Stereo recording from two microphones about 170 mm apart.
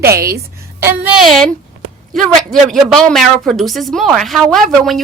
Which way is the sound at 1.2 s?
Centre (ahead or behind).